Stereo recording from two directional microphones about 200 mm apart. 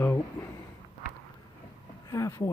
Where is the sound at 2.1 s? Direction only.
15° left (ahead or behind).